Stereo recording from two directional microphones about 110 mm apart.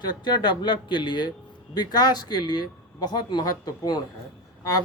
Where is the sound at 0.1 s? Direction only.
40° left (ahead or behind).